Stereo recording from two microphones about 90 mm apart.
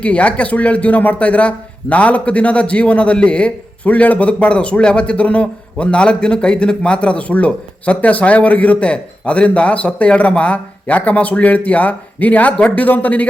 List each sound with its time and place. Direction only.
0.0 s speech: 15° left (ahead or behind)